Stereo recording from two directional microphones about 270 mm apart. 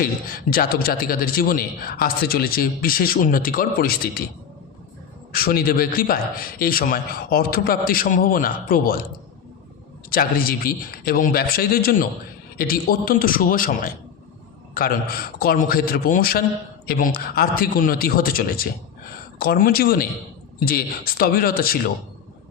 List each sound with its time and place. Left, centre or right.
0.0 s a man's voice: left
5.3 s a man's voice: left
10.1 s a man's voice: left